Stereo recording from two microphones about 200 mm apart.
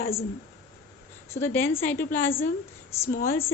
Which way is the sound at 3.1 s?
45° left (ahead or behind).